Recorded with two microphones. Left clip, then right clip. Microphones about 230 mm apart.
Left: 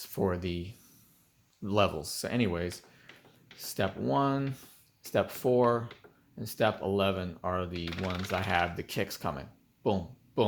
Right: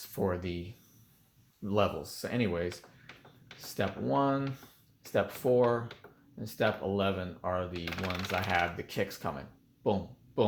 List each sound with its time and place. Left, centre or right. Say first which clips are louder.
0.0 s speech: left 1 dB; left
1.6 s speech: left 2 dB; left
3.8 s speech: left 1 dB; left